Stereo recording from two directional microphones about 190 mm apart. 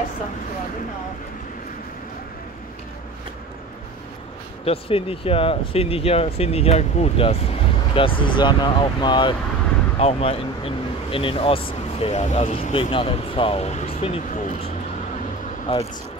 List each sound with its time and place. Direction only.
4.6 s speech: 30° left (ahead or behind)
15.7 s speech: 25° left (ahead or behind)